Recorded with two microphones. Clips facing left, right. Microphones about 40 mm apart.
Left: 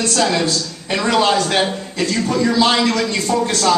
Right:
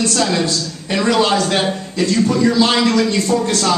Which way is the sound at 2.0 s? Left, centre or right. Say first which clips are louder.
Right 4 dB; left.